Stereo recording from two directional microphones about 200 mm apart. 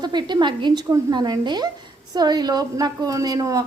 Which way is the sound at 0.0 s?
20° right (ahead or behind).